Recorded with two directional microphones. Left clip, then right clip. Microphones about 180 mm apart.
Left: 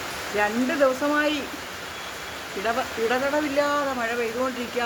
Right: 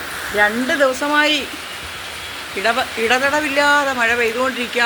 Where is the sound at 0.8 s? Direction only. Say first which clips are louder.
Right 6 dB; 20° right (ahead or behind).